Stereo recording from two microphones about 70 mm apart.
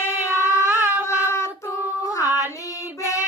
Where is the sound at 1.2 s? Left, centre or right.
Left.